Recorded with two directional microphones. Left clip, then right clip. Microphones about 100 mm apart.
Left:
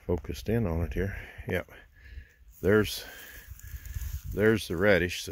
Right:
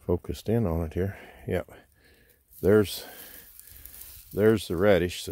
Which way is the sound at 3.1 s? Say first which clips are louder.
Left 2 dB; 50° right (ahead or behind).